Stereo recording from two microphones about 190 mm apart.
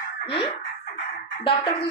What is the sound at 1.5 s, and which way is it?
Speech, 30° left (ahead or behind).